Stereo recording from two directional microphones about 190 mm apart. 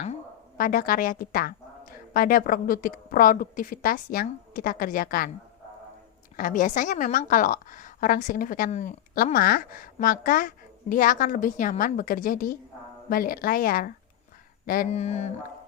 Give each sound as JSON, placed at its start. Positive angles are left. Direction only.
{"t": 0.5, "sound": "a woman's voice", "side_deg": 50}
{"t": 6.3, "sound": "a woman's voice", "side_deg": 45}
{"t": 14.7, "sound": "a sound", "side_deg": 40}